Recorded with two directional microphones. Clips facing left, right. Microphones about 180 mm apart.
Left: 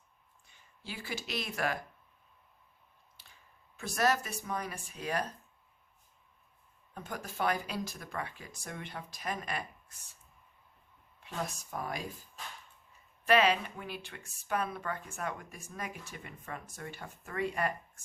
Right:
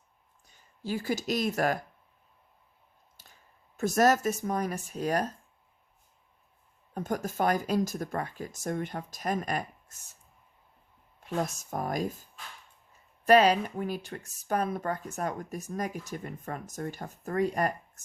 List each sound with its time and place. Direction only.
0.4 s speech: 40° right (ahead or behind)
3.2 s a sound: 45° right (ahead or behind)
3.8 s speech: 45° right (ahead or behind)
6.9 s speech: 45° right (ahead or behind)
11.2 s speech: 45° right (ahead or behind)
13.2 s speech: 40° right (ahead or behind)